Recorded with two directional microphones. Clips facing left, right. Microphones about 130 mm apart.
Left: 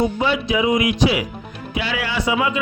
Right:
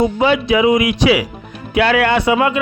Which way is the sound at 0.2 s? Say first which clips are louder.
Right 6 dB; 70° right (ahead or behind).